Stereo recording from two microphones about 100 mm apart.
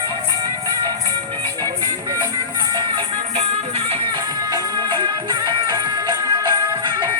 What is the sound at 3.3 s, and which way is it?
Music, 90° right.